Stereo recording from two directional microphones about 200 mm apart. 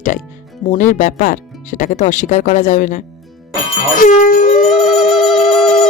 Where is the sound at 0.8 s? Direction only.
40° left (ahead or behind).